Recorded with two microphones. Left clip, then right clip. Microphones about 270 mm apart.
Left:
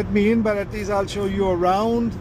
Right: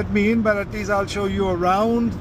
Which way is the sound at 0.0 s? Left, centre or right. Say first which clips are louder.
Even; centre.